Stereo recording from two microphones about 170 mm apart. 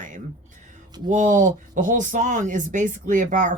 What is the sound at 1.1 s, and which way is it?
Speech, 45° right (ahead or behind).